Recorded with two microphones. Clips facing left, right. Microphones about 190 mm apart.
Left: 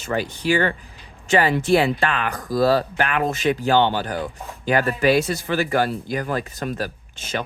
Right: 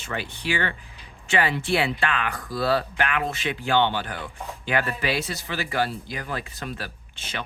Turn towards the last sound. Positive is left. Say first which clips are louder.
# left 8 dB
turn(degrees=45)  # may be behind; listen again after turning